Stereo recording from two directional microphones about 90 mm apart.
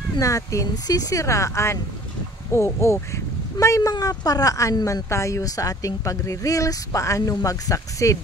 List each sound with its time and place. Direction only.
0.2 s speech: 35° left (ahead or behind)